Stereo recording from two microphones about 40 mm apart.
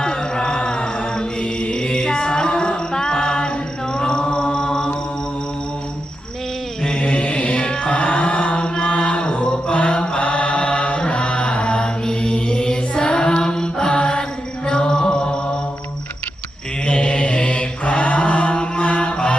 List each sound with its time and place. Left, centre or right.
0.0 s music: left
3.9 s chant: left
6.8 s mantra: left
8.9 s chant: left
14.7 s music: centre
16.8 s mantra: left